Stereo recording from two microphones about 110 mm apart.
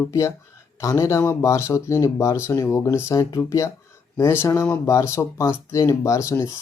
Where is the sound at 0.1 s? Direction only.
25° left (ahead or behind).